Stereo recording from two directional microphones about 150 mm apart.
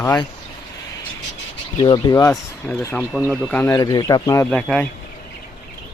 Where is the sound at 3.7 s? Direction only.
25° left (ahead or behind).